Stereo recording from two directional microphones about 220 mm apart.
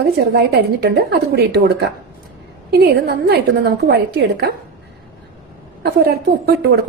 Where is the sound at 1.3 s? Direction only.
45° right (ahead or behind).